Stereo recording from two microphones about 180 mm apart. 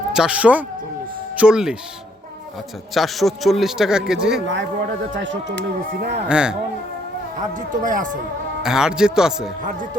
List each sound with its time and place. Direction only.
0.1 s a man's voice: 5° right (ahead or behind)
2.9 s a man's voice: centre (ahead or behind)
5.1 s speech: 85° right; by 6.1 s 70° right (ahead or behind)
6.2 s a man's voice: 5° right (ahead or behind)
7.7 s speech: 45° right (ahead or behind)
8.6 s a man's voice: 5° right (ahead or behind)